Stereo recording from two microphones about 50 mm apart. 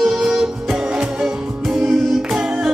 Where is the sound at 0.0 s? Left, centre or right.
Centre.